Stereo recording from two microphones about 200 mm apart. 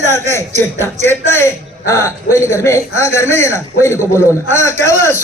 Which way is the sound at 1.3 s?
15° left (ahead or behind).